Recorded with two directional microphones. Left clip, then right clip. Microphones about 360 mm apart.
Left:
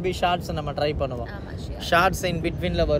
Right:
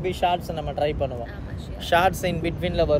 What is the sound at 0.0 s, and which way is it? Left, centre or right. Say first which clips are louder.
Speech: even; centre.